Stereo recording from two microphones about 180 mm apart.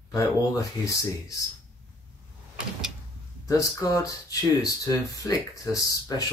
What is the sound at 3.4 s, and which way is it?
Speech, 15° left (ahead or behind).